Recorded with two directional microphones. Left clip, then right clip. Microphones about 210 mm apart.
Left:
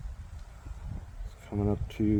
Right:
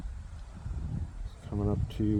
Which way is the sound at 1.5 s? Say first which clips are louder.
Left 2 dB; 40° left (ahead or behind).